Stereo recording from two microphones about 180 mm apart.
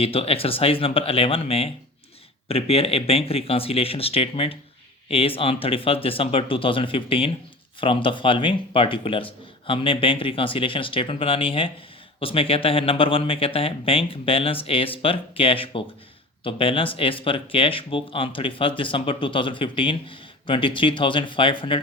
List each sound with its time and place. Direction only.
0.0 s speech: 30° left (ahead or behind)